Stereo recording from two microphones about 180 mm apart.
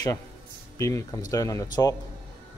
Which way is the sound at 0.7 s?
15° left (ahead or behind).